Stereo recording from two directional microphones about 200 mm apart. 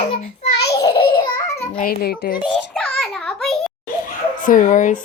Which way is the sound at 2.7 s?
5° left (ahead or behind).